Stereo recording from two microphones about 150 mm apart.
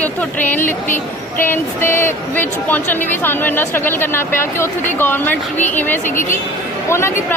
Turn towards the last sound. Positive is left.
turn(degrees=15)  # may be behind; listen again after turning